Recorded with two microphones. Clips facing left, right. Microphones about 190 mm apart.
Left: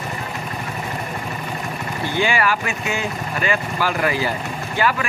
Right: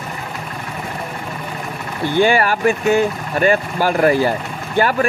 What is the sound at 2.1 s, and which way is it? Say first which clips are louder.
Speech: right 5 dB; 50° right (ahead or behind).